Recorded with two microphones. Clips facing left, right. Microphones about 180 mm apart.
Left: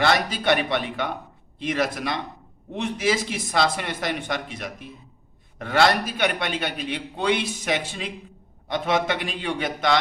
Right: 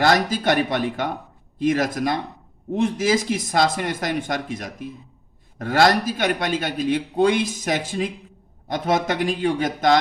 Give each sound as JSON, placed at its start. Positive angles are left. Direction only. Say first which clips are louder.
{"t": 0.0, "sound": "a man's voice", "louder": "right 3 dB", "side_deg": -45}